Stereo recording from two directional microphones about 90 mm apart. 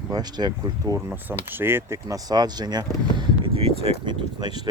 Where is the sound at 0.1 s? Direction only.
50° right (ahead or behind).